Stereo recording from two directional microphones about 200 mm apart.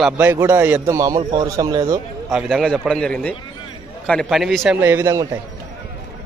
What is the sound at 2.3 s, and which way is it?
A man's voice, centre (ahead or behind).